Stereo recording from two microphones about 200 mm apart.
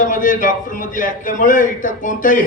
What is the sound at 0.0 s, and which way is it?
Speech, 40° left (ahead or behind).